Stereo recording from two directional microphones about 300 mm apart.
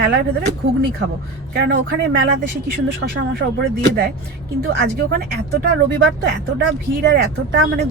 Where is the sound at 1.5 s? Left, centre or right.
Right.